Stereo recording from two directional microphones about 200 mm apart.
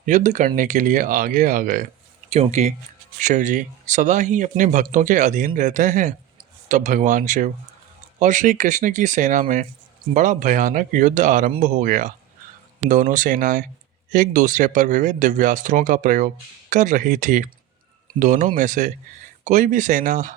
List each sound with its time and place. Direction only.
0.0 s speech: 35° right (ahead or behind)
2.3 s speech: 35° right (ahead or behind)